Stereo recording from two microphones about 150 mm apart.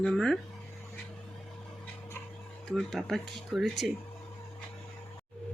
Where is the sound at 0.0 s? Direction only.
Centre (ahead or behind).